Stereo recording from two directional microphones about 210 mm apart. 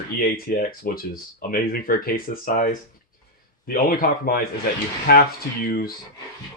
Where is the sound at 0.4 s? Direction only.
45° left (ahead or behind).